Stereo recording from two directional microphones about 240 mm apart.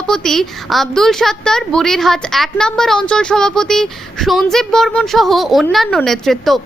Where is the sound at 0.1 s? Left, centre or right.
Centre.